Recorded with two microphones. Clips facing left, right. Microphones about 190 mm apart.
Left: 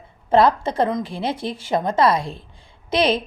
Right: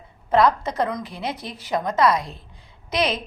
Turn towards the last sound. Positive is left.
turn(degrees=30)  # may be behind; listen again after turning